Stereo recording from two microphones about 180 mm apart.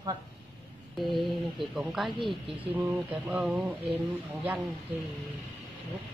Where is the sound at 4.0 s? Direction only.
5° right (ahead or behind).